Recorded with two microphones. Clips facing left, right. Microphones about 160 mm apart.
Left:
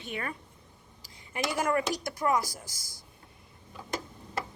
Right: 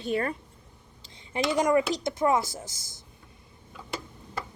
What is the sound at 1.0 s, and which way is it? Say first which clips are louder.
Speech: right 5 dB; 25° right (ahead or behind).